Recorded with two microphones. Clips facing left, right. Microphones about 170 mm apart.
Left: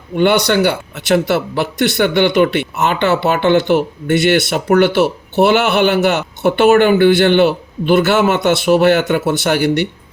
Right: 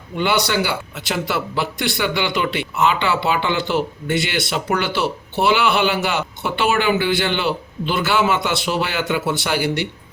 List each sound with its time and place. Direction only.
0.2 s speech: 60° left (ahead or behind)